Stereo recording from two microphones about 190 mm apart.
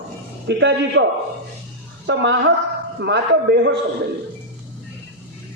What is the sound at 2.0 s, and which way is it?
A woman's voice, 70° right (ahead or behind).